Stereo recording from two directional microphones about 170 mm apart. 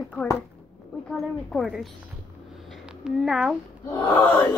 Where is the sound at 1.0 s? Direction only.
Centre (ahead or behind).